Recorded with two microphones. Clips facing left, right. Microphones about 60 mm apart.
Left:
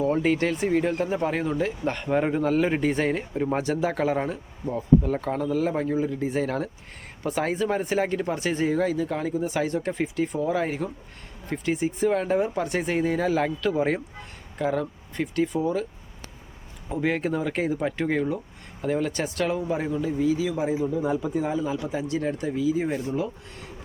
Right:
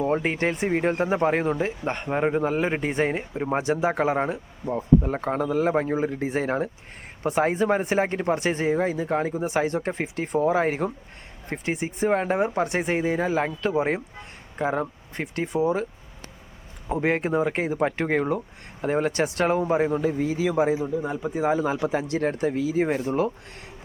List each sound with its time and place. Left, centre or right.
0.0 s speech: right
13.1 s speech: right
16.9 s speech: right
21.0 s speech: centre
21.3 s speech: right